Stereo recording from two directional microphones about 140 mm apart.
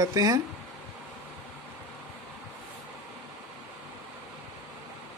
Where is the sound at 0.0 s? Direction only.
25° right (ahead or behind).